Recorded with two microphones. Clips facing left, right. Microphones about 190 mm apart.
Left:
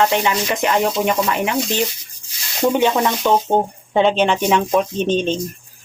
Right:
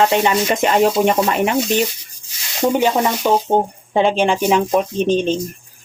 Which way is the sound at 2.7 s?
5° right (ahead or behind).